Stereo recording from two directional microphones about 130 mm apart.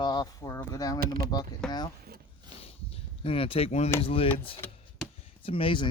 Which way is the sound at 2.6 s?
50° left (ahead or behind).